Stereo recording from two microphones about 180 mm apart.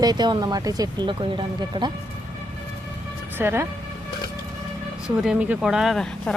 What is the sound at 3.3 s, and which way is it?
Speech, 15° right (ahead or behind).